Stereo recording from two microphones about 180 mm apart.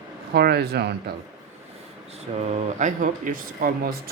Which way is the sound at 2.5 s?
40° right (ahead or behind).